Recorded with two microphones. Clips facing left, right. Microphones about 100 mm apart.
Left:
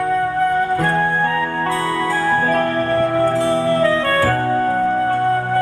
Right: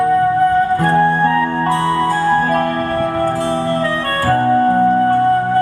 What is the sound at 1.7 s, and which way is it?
Music, 25° right (ahead or behind).